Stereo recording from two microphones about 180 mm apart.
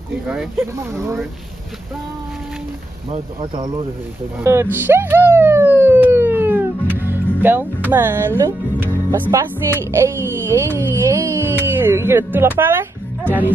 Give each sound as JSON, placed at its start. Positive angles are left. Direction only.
{"t": 0.3, "sound": "speech", "side_deg": -5}
{"t": 3.1, "sound": "speech", "side_deg": -30}
{"t": 4.4, "sound": "emergency vehicle", "side_deg": -15}
{"t": 7.4, "sound": "speech", "side_deg": -10}